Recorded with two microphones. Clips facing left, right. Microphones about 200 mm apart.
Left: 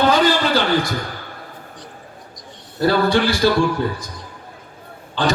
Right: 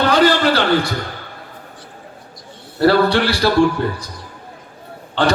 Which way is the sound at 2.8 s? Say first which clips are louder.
Right 3 dB; 65° right (ahead or behind).